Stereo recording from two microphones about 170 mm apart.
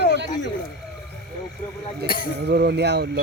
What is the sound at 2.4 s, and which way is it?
Speech, 75° right (ahead or behind).